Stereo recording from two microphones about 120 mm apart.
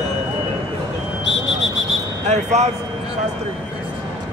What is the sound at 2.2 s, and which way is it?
Speech, 70° right (ahead or behind).